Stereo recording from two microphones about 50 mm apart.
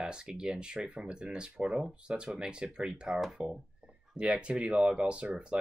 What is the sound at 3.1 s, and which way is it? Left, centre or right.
Speech, centre.